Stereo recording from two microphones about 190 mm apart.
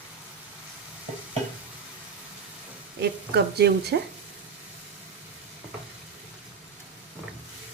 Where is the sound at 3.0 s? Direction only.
60° right (ahead or behind).